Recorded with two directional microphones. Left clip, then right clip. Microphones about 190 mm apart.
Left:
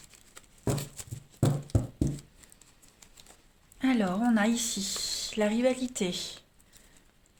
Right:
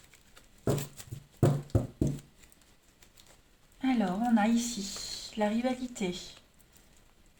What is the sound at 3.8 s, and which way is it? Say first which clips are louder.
Speech: left 2 dB; 55° left (ahead or behind).